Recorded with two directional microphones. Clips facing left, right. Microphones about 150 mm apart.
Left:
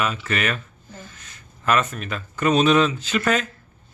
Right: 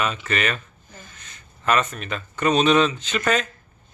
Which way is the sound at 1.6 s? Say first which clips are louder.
Even; 5° left (ahead or behind).